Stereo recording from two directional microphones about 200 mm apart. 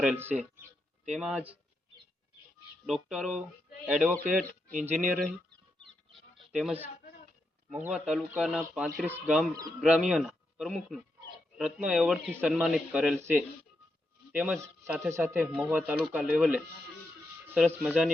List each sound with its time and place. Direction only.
0.0 s speech: 5° right (ahead or behind)
2.8 s speech: centre (ahead or behind)
4.4 s speech: 40° right (ahead or behind)
4.9 s speech: centre (ahead or behind)
6.5 s speech: 5° right (ahead or behind)
7.9 s speech: 5° right (ahead or behind)